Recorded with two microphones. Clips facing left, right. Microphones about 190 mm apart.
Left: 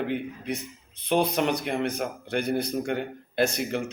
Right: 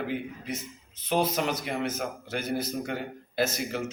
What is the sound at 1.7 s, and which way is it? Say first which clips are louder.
Speech: left 3 dB; 60° left (ahead or behind).